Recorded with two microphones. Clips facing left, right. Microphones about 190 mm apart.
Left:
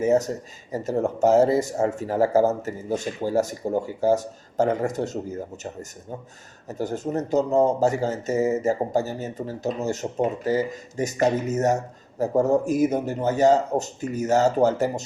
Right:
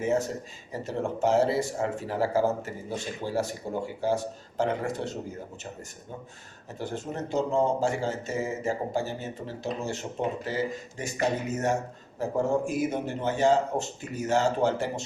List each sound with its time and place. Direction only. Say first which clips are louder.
0.0 s speech: left 6 dB; 40° left (ahead or behind)
6.7 s speech: left 7 dB; 40° left (ahead or behind)